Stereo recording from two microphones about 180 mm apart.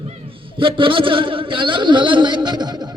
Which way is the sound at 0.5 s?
30° right (ahead or behind).